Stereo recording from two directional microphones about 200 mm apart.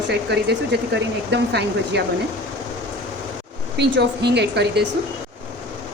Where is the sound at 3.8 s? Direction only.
55° right (ahead or behind).